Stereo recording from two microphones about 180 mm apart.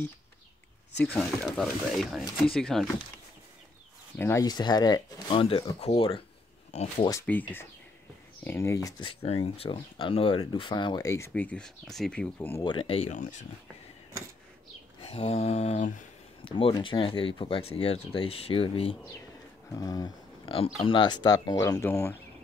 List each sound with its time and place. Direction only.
1.0 s speech: centre (ahead or behind)
4.2 s speech: 15° left (ahead or behind); by 7.1 s 40° left (ahead or behind)
7.1 s speech: 10° left (ahead or behind)
8.5 s speech: 15° left (ahead or behind)
9.2 s speech: 35° left (ahead or behind); by 12.6 s 10° left (ahead or behind)
12.6 s speech: 30° left (ahead or behind)
15.0 s mantra: 35° left (ahead or behind)
16.5 s speech: 30° left (ahead or behind)
19.7 s speech: 20° left (ahead or behind)
20.5 s speech: 30° left (ahead or behind); by 22.2 s 10° left (ahead or behind)